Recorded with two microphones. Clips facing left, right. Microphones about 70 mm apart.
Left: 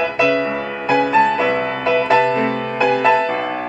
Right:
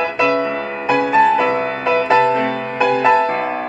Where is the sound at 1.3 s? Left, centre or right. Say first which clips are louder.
Right 2 dB; centre.